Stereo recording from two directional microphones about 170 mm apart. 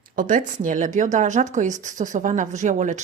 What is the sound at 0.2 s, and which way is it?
A woman's voice, 50° right (ahead or behind).